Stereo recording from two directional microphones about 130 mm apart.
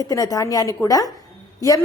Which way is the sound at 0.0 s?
25° left (ahead or behind).